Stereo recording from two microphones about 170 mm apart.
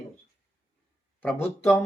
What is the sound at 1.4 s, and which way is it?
Speech, 15° left (ahead or behind).